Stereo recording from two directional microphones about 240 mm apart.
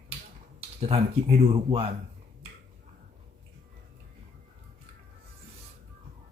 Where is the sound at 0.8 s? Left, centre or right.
Right.